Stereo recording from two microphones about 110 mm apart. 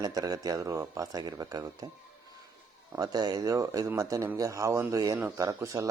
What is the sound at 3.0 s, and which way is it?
A man's voice, 35° right (ahead or behind).